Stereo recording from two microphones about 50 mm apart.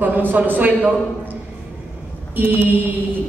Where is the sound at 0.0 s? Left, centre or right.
Right.